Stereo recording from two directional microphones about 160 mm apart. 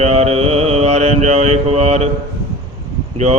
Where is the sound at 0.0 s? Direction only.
40° right (ahead or behind).